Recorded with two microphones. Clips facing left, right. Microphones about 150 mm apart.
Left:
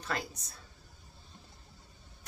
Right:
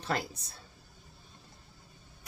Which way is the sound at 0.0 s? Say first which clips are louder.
Right 3 dB; 30° right (ahead or behind).